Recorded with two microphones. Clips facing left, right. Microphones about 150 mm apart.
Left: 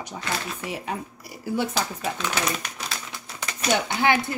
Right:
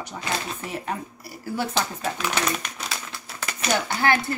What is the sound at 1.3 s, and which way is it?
Speech, 15° left (ahead or behind).